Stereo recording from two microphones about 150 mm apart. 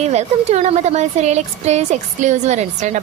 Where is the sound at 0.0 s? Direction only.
50° right (ahead or behind).